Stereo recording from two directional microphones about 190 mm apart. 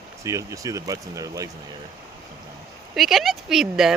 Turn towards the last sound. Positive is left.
turn(degrees=-5)  # may be behind; listen again after turning